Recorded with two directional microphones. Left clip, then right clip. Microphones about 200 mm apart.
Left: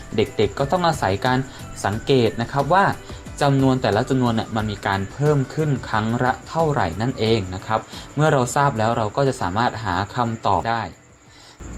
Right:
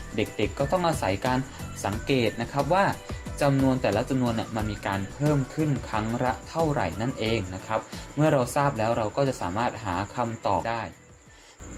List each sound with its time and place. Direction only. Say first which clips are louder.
0.2 s speech: left 7 dB; 20° left (ahead or behind)